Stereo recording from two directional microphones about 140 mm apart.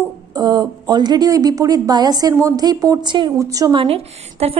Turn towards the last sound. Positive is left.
turn(degrees=-45)  # may be behind; listen again after turning